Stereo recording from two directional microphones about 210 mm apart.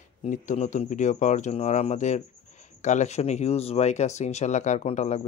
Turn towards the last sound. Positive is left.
turn(degrees=35)  # may be behind; listen again after turning